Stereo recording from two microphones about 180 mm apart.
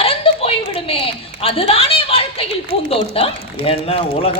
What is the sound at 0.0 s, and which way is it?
Chuckle, 30° left (ahead or behind).